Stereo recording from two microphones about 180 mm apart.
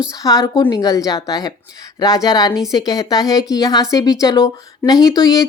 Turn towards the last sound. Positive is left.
turn(degrees=20)  # may be behind; listen again after turning